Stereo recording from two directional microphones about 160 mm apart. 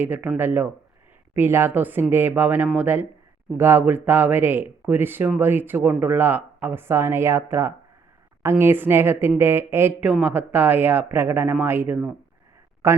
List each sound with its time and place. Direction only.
0.0 s speech: 10° right (ahead or behind)